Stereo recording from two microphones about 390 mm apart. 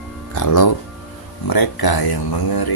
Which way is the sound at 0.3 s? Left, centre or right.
Left.